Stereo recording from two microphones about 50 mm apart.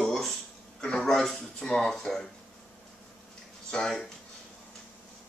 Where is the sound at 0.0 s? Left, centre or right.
Centre.